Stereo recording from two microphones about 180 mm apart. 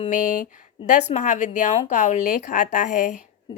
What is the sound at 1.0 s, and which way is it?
A woman's voice, 40° left (ahead or behind).